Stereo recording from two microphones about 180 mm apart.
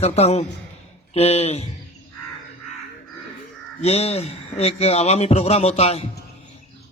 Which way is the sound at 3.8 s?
35° left (ahead or behind).